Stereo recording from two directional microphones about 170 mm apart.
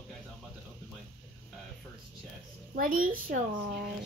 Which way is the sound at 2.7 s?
55° right (ahead or behind).